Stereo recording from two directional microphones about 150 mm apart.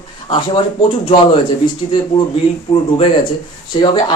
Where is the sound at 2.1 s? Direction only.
40° left (ahead or behind).